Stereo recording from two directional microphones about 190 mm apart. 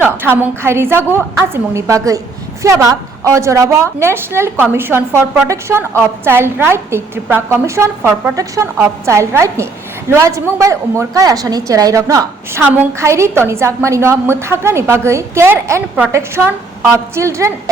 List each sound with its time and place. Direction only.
0.0 s a woman's voice: 10° right (ahead or behind)